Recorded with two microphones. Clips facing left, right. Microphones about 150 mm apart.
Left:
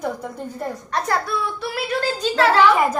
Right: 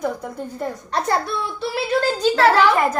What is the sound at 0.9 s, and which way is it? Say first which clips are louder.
Speech: right 1 dB; 25° right (ahead or behind).